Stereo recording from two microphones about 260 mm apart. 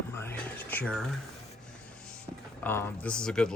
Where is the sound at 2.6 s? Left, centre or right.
Centre.